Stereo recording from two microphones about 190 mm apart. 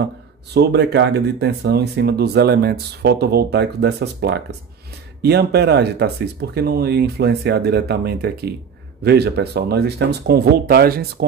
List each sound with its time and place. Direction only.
0.0 s speech: 60° right (ahead or behind)